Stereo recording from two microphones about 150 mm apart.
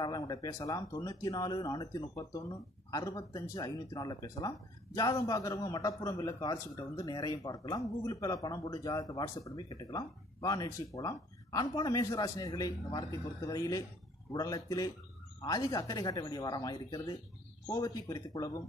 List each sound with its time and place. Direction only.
0.0 s speech: 25° left (ahead or behind)